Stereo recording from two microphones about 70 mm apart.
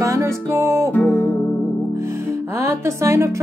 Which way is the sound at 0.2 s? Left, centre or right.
Right.